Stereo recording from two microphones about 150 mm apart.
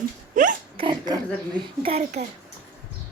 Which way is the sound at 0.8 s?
30° right (ahead or behind).